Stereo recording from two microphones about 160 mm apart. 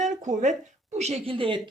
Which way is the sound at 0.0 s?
50° right (ahead or behind).